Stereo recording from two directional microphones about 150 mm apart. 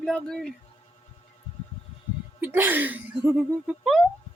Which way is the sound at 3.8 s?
Centre (ahead or behind).